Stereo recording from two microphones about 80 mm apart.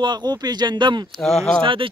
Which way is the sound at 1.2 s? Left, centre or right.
Centre.